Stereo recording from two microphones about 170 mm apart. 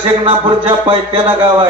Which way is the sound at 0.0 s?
30° right (ahead or behind).